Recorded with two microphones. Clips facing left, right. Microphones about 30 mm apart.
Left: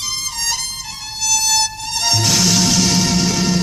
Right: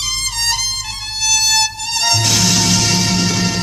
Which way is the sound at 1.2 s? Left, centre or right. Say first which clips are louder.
Right 2 dB; centre.